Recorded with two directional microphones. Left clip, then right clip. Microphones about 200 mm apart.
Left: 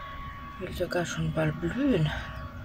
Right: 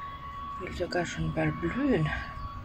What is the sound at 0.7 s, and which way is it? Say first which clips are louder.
Speech: left 2 dB; 5° left (ahead or behind).